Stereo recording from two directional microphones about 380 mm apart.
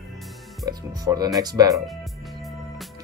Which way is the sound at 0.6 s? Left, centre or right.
Centre.